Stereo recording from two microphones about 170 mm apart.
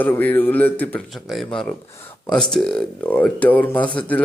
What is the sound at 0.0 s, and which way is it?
Speech, 10° left (ahead or behind).